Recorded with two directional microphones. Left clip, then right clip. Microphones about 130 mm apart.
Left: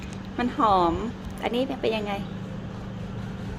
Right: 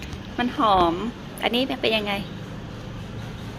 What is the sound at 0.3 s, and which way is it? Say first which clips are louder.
Speech: right 2 dB; 15° left (ahead or behind).